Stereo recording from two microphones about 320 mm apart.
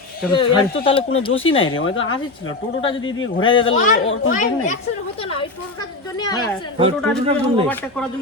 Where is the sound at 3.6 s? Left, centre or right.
Left.